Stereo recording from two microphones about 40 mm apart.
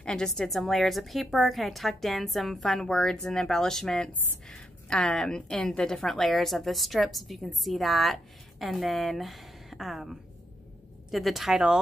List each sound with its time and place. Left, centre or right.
0.0 s a woman's voice: centre
0.3 s a woman's voice: centre
2.9 s a woman's voice: centre